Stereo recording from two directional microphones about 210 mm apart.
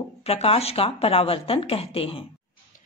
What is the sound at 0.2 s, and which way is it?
Speech, 30° left (ahead or behind).